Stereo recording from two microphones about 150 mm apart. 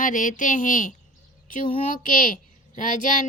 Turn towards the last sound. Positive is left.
turn(degrees=60)  # may be behind; listen again after turning